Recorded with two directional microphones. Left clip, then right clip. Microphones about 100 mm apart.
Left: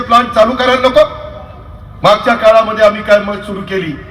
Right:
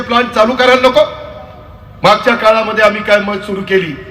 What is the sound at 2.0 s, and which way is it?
A man's voice, 40° right (ahead or behind).